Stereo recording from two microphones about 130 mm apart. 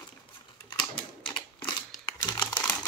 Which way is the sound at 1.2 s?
35° left (ahead or behind).